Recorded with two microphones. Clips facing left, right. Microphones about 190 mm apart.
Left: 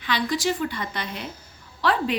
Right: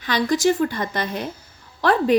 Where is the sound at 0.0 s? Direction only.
45° right (ahead or behind).